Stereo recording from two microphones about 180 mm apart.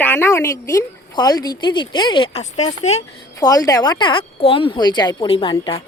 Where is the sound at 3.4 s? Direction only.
20° left (ahead or behind).